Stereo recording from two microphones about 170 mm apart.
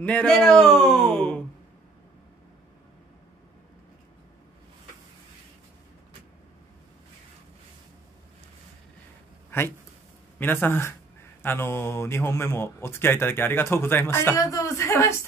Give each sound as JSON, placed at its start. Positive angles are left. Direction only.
{"t": 0.0, "sound": "speech", "side_deg": 5}
{"t": 9.5, "sound": "speech", "side_deg": 15}